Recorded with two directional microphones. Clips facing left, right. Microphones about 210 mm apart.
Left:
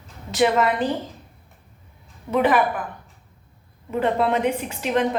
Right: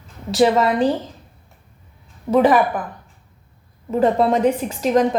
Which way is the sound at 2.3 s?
35° right (ahead or behind).